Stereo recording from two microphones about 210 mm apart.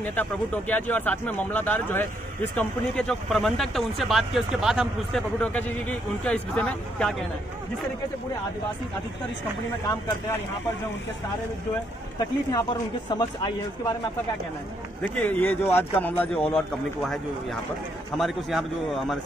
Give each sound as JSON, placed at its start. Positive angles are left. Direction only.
{"t": 0.0, "sound": "speech", "side_deg": 10}
{"t": 13.1, "sound": "a man's voice", "side_deg": 20}
{"t": 15.1, "sound": "speech", "side_deg": 5}